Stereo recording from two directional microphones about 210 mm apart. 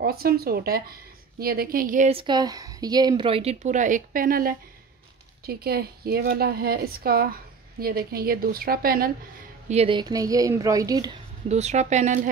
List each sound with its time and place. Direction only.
0.0 s a woman's voice: 45° right (ahead or behind)
9.7 s a woman's voice: 25° right (ahead or behind)
11.4 s a woman's voice: 30° right (ahead or behind)